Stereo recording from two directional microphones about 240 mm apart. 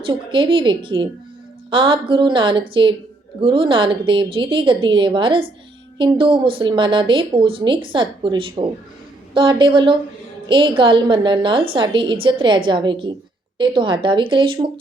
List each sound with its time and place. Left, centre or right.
0.0 s speech: right